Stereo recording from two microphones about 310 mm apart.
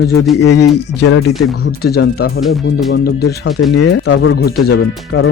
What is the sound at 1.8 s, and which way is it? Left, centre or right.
Speech, left.